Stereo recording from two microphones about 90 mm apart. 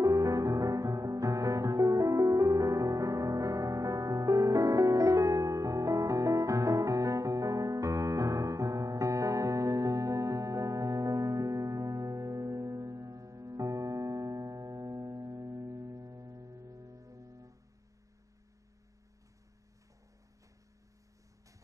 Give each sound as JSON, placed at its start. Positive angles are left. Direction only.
{"t": 0.0, "sound": "music", "side_deg": -40}